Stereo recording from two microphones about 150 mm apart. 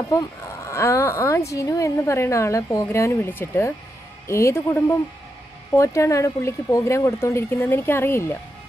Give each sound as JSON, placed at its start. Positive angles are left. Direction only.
{"t": 0.1, "sound": "speech", "side_deg": 20}